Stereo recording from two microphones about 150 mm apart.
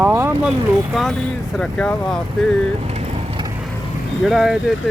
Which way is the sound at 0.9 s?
Centre (ahead or behind).